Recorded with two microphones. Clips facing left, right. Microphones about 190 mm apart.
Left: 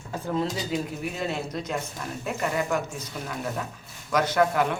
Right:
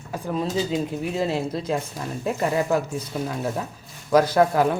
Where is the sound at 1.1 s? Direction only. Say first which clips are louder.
Right 7 dB; 30° right (ahead or behind).